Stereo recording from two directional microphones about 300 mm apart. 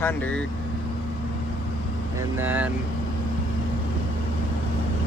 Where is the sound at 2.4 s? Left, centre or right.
Centre.